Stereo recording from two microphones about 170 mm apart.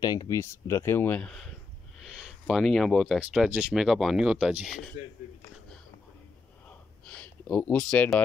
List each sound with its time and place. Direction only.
0.0 s speech: 25° left (ahead or behind); by 4.9 s centre (ahead or behind)
7.1 s speech: 10° left (ahead or behind)